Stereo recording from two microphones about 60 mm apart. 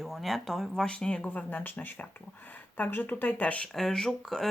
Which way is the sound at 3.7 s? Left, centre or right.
Centre.